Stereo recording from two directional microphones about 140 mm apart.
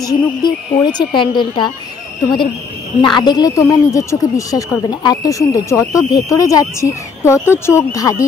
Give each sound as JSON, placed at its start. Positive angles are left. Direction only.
{"t": 0.0, "sound": "speech", "side_deg": 30}
{"t": 3.0, "sound": "speech", "side_deg": 30}